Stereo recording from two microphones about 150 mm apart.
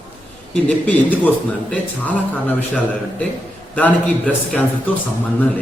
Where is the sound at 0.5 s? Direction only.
10° left (ahead or behind).